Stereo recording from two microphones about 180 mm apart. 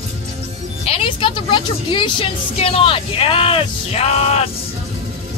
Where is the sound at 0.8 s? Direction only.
30° left (ahead or behind).